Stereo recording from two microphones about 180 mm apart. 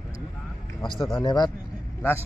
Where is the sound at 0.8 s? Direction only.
25° left (ahead or behind).